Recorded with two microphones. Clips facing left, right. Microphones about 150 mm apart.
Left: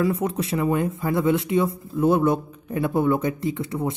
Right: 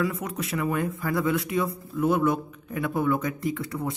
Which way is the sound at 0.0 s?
30° left (ahead or behind).